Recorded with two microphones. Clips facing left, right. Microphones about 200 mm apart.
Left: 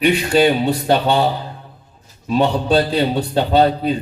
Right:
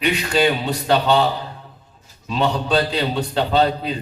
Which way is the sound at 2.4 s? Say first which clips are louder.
Left 3 dB; 30° left (ahead or behind).